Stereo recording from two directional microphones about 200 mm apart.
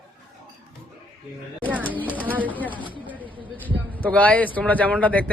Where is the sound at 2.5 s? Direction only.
10° left (ahead or behind).